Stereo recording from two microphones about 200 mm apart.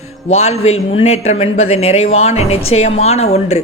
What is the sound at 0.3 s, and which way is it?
A man's voice, 30° left (ahead or behind).